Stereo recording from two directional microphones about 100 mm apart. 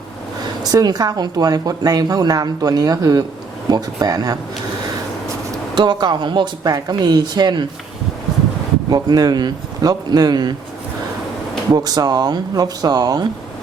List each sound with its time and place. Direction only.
0.6 s a woman's voice: 40° right (ahead or behind)
5.7 s speech: 45° right (ahead or behind)
8.9 s a woman's voice: 40° right (ahead or behind)
11.7 s a woman's voice: 40° right (ahead or behind)